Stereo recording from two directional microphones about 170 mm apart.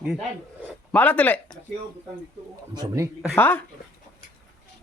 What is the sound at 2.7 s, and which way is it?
Speech, 20° right (ahead or behind).